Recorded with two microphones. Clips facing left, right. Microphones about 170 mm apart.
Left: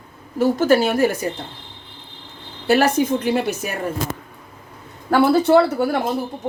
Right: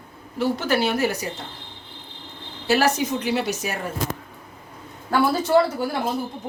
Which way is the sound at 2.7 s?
55° left (ahead or behind).